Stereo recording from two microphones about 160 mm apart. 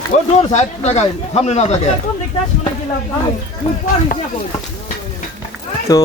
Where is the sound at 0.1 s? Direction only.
45° left (ahead or behind).